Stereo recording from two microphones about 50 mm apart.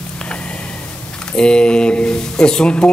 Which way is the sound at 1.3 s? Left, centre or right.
Centre.